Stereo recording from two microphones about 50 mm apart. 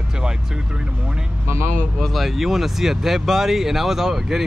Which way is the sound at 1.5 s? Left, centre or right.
Right.